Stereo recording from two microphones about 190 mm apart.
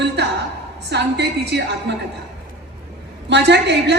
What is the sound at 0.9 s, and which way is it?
A woman's voice, 65° right (ahead or behind).